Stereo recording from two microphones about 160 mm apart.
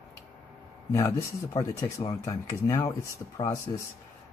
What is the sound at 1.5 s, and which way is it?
Speech, 20° left (ahead or behind).